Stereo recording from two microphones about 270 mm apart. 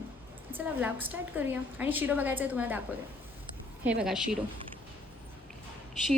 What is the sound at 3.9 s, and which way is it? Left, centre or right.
Speech, centre.